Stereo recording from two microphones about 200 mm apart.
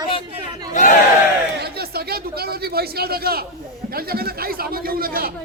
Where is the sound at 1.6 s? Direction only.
50° right (ahead or behind).